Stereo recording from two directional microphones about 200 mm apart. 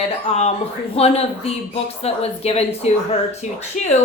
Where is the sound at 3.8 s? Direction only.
35° left (ahead or behind).